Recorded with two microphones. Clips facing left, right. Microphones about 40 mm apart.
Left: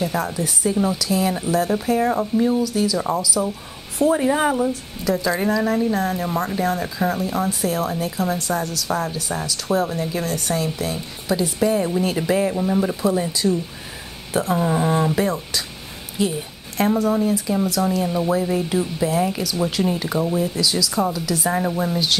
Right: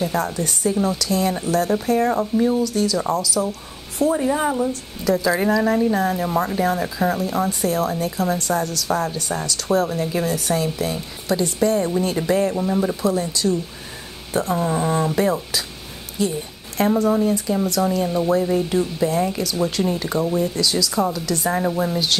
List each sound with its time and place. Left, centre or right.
0.0 s a woman's voice: centre
4.0 s a woman's voice: centre
4.6 s a woman's voice: centre
16.7 s a woman's voice: centre